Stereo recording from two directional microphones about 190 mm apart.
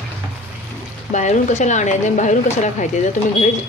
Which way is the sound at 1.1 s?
40° left (ahead or behind).